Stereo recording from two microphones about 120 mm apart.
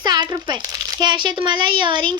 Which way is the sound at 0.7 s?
35° right (ahead or behind).